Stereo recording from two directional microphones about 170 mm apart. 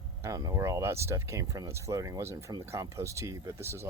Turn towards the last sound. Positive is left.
turn(degrees=-15)  # may be behind; listen again after turning